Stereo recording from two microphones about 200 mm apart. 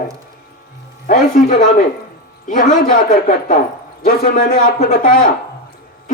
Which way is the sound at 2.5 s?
40° left (ahead or behind).